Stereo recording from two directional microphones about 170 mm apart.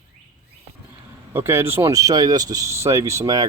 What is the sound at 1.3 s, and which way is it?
Speech, 15° right (ahead or behind).